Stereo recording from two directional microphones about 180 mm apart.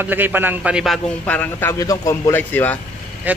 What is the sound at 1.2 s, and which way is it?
A man's voice, 10° left (ahead or behind).